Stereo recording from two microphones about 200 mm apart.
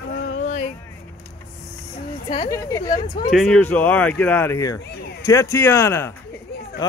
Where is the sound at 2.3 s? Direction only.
20° left (ahead or behind).